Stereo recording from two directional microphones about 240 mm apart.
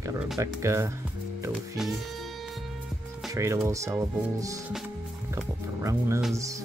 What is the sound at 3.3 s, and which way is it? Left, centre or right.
Speech, centre.